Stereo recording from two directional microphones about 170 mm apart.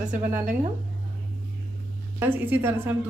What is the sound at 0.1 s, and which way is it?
Speech, 50° right (ahead or behind).